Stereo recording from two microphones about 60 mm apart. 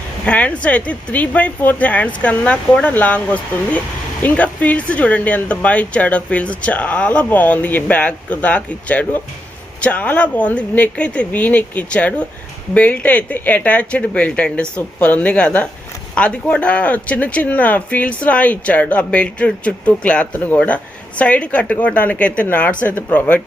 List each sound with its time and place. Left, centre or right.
0.3 s speech: left